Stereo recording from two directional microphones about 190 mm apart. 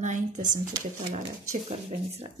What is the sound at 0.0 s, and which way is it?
Speech, 40° right (ahead or behind).